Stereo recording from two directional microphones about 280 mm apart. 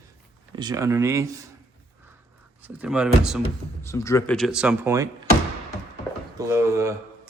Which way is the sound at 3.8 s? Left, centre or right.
Centre.